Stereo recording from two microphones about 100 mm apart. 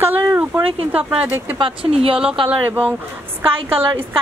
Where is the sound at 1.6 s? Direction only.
70° right (ahead or behind).